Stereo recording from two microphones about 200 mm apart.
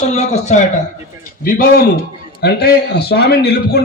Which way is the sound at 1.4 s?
45° left (ahead or behind).